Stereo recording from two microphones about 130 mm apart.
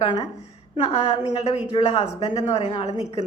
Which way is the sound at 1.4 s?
55° left (ahead or behind).